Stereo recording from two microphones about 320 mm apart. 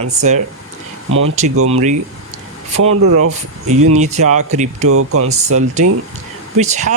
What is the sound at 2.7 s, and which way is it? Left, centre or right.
Speech, right.